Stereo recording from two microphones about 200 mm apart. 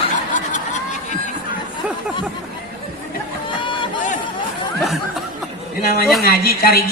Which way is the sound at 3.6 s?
25° left (ahead or behind).